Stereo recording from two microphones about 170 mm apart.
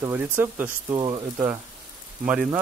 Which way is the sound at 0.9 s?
25° right (ahead or behind).